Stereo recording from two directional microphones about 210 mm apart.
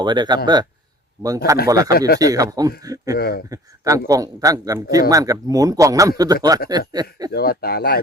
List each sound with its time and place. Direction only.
0.0 s a man's voice: 20° right (ahead or behind)
1.9 s speech: 45° left (ahead or behind)
2.1 s a man's voice: 15° right (ahead or behind)
3.2 s speech: 45° left (ahead or behind)
3.5 s a man's voice: 15° right (ahead or behind)
7.3 s speech: 45° left (ahead or behind)